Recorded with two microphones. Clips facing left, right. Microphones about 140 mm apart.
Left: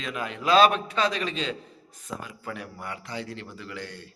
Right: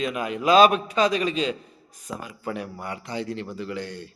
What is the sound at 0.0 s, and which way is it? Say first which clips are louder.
A man's voice: right 6 dB; 15° right (ahead or behind).